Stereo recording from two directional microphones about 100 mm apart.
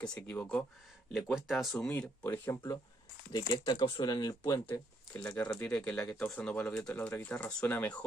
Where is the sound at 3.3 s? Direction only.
45° left (ahead or behind).